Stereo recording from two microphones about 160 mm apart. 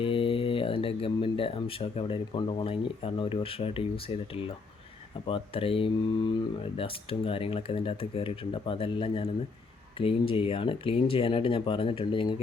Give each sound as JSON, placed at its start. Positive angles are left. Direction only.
{"t": 0.0, "sound": "speech", "side_deg": 35}